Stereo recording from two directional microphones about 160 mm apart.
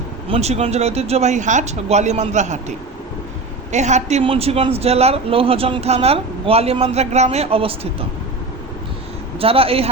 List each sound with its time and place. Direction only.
0.3 s speech: 40° right (ahead or behind)
9.4 s speech: 35° right (ahead or behind)